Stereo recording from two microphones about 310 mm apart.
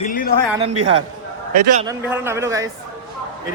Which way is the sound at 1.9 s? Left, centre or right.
Centre.